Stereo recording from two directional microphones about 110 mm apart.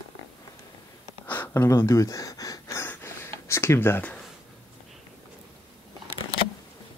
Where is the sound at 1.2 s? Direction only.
15° left (ahead or behind).